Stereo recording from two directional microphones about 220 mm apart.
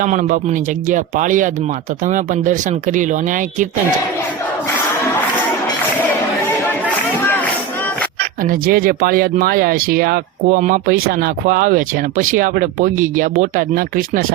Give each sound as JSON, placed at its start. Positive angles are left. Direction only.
{"t": 0.0, "sound": "speech", "side_deg": -35}
{"t": 8.2, "sound": "speech", "side_deg": -40}